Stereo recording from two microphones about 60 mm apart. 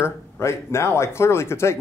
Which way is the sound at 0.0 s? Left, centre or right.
Left.